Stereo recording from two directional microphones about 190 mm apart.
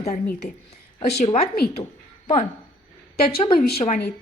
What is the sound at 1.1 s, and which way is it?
Speech, 35° left (ahead or behind).